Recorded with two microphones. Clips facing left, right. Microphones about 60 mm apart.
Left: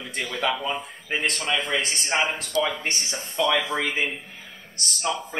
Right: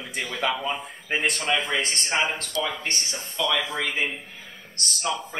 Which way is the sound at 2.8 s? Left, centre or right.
Left.